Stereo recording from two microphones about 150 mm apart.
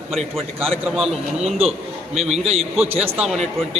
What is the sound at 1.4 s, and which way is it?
A man's voice, 45° right (ahead or behind).